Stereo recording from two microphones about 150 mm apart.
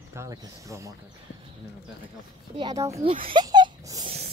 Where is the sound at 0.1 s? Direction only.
20° right (ahead or behind).